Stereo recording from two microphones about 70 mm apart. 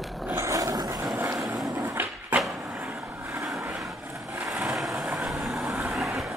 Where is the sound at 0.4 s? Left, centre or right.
Right.